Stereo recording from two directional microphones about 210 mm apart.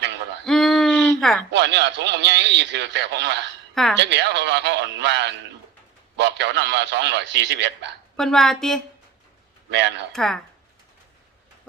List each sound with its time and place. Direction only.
0.4 s a sound: centre (ahead or behind)
1.5 s a man's voice: 55° right (ahead or behind)
8.1 s a woman's voice: centre (ahead or behind)
9.6 s speech: 55° right (ahead or behind)
10.1 s a woman's voice: centre (ahead or behind)